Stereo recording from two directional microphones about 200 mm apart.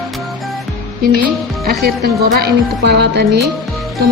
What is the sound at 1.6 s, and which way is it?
Speech, 50° right (ahead or behind).